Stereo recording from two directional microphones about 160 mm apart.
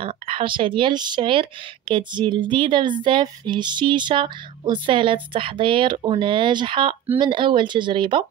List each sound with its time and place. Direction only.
0.0 s speech: 35° right (ahead or behind)